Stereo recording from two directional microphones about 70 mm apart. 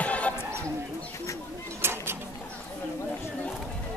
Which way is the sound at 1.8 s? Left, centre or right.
Right.